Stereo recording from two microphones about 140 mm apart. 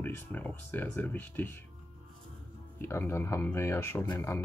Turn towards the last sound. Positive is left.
turn(degrees=20)  # may be behind; listen again after turning